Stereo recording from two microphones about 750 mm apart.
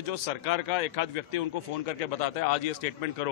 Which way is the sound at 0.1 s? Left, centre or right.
Left.